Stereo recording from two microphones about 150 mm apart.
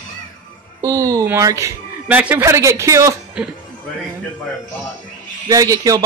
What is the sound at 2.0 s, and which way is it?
Speech, 10° right (ahead or behind).